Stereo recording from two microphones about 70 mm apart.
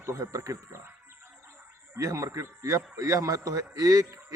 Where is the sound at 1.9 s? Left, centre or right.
Right.